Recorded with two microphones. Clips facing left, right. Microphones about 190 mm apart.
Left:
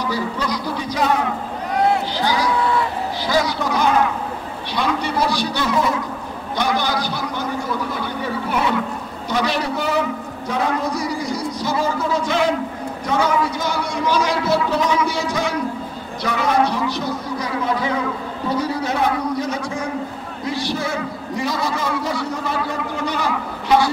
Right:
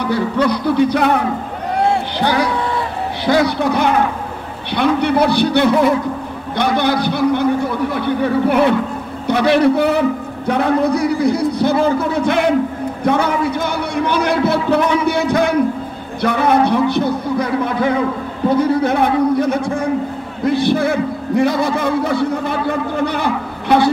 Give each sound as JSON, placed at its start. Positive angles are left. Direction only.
{"t": 0.0, "sound": "a man's voice", "side_deg": -60}
{"t": 2.1, "sound": "a man's voice", "side_deg": -60}